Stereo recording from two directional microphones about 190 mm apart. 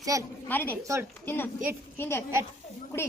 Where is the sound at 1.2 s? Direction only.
10° left (ahead or behind).